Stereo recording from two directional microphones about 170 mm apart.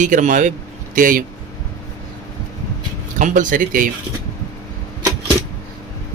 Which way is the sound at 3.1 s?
50° right (ahead or behind).